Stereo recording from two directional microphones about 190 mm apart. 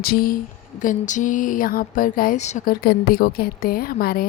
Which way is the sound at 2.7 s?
55° left (ahead or behind).